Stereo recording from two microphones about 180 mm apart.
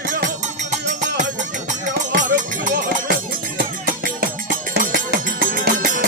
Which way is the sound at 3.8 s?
50° right (ahead or behind).